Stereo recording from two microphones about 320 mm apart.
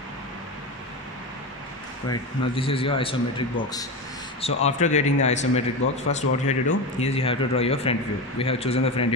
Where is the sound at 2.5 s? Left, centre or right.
Centre.